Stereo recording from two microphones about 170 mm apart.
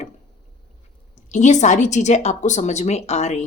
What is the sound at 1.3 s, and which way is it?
A woman's voice, 45° left (ahead or behind).